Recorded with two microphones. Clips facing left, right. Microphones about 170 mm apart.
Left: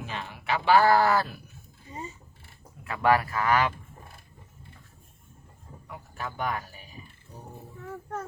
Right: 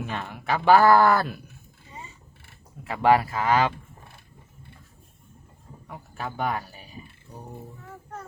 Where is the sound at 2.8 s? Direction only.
25° right (ahead or behind).